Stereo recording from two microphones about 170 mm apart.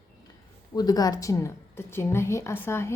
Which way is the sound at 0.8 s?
20° left (ahead or behind).